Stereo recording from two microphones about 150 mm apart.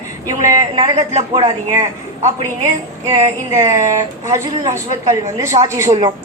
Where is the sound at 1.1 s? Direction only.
45° right (ahead or behind).